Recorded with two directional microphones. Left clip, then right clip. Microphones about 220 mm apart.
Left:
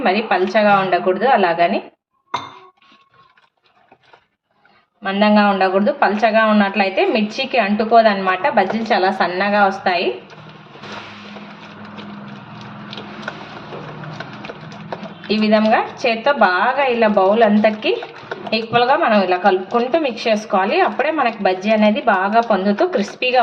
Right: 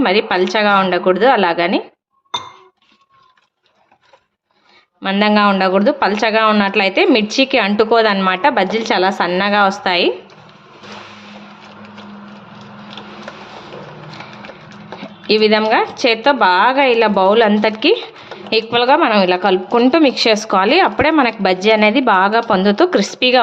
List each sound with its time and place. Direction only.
0.0 s a woman's voice: 40° right (ahead or behind)
5.0 s a man's voice: 45° right (ahead or behind)
15.3 s a woman's voice: 40° right (ahead or behind)